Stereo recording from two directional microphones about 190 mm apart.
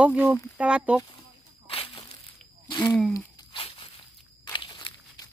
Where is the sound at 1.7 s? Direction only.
30° left (ahead or behind).